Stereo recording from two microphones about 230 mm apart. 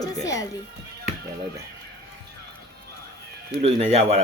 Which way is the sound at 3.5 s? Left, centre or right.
Right.